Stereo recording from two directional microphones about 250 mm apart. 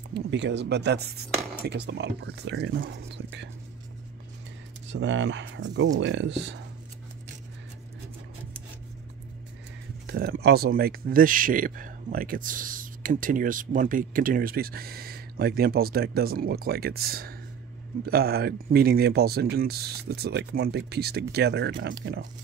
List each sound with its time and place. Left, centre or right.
0.1 s chopping: right
4.9 s chopping: right
10.0 s speech: right